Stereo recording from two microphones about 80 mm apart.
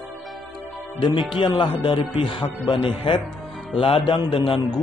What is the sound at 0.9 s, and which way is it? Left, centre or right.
Speech, left.